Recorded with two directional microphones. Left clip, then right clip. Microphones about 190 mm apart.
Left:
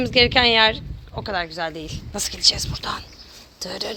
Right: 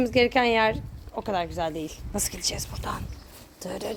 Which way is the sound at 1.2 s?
15° right (ahead or behind).